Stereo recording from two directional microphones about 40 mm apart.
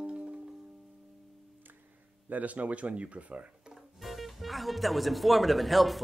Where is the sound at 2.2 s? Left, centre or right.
Right.